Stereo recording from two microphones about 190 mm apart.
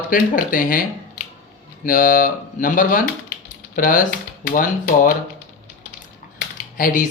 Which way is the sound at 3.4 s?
45° left (ahead or behind).